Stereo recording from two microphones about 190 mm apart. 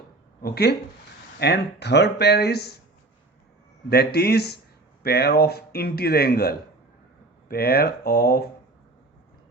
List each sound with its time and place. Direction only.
0.4 s a man's voice: 60° left (ahead or behind)
3.8 s a man's voice: 55° left (ahead or behind)